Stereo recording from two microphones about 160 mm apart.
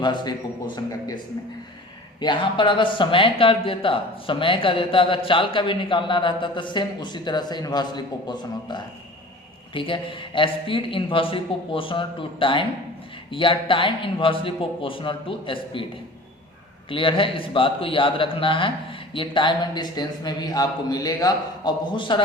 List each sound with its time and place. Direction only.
0.0 s a man's voice: 30° left (ahead or behind)
16.9 s speech: 30° left (ahead or behind)